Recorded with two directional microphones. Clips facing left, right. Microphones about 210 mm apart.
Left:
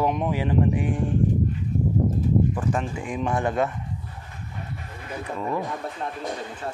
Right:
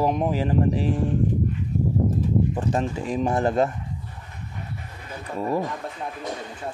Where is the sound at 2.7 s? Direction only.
35° right (ahead or behind).